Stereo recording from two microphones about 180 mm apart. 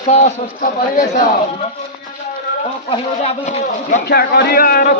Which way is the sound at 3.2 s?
40° left (ahead or behind).